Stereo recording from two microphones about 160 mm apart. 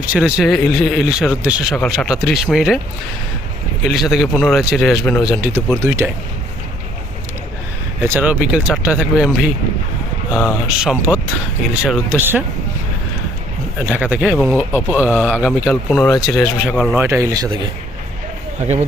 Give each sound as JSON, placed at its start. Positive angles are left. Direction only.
{"t": 0.0, "sound": "speech", "side_deg": -10}
{"t": 1.7, "sound": "speech", "side_deg": 5}
{"t": 3.8, "sound": "speech", "side_deg": 0}
{"t": 5.8, "sound": "speech", "side_deg": -15}
{"t": 8.0, "sound": "speech", "side_deg": -10}
{"t": 10.3, "sound": "speech", "side_deg": 0}
{"t": 13.8, "sound": "speech", "side_deg": -10}
{"t": 17.0, "sound": "speech", "side_deg": -15}